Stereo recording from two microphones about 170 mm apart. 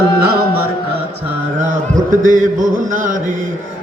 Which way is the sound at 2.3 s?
50° right (ahead or behind).